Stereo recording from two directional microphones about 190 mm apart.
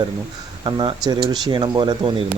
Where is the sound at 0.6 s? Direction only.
25° right (ahead or behind).